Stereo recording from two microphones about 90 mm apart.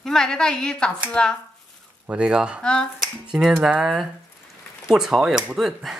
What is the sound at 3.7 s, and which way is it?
A woman's voice, 5° right (ahead or behind).